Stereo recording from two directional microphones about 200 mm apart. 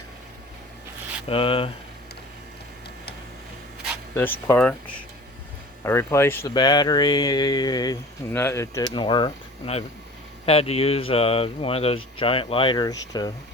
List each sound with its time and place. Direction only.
1.3 s speech: 25° left (ahead or behind)
4.1 s speech: 10° left (ahead or behind)
5.8 s speech: 15° left (ahead or behind)